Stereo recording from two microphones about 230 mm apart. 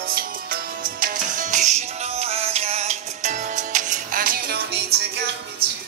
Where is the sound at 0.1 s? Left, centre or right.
Right.